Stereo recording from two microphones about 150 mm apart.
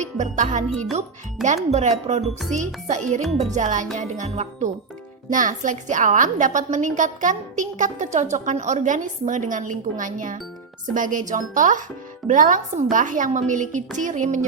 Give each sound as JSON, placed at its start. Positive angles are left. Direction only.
{"t": 0.0, "sound": "speech", "side_deg": -55}
{"t": 1.4, "sound": "speech", "side_deg": 0}
{"t": 1.7, "sound": "a woman's voice", "side_deg": -50}